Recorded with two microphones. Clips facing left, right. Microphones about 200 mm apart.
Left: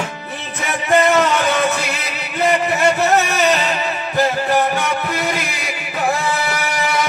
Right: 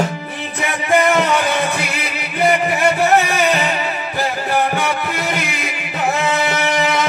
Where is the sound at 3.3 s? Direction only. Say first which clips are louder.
Even; 10° right (ahead or behind).